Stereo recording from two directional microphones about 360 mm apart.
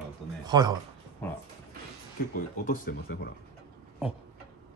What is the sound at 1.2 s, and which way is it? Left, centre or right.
Speech, centre.